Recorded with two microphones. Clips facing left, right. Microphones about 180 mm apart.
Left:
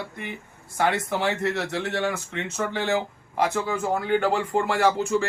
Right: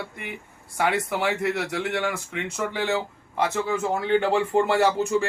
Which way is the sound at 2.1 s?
15° right (ahead or behind).